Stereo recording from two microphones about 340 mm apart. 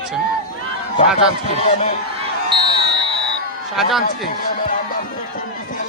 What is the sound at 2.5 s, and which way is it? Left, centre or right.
Basketball bounce, centre.